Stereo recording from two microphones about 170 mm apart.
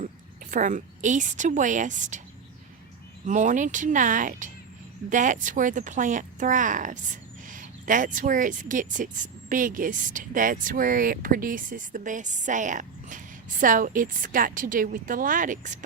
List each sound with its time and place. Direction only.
0.5 s speech: 45° right (ahead or behind)
3.2 s speech: 45° right (ahead or behind)